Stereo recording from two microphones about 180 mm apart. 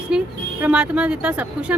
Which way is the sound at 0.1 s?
5° right (ahead or behind).